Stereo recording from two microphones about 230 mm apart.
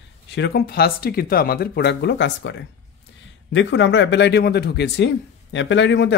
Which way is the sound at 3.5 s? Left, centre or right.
Left.